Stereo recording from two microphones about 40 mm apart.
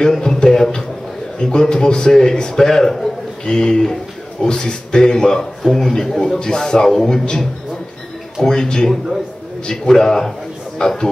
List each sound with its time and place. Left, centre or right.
0.2 s a man's voice: centre